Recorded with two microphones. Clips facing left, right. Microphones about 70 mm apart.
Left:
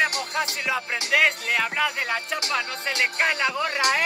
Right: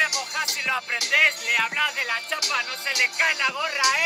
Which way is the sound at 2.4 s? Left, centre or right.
Left.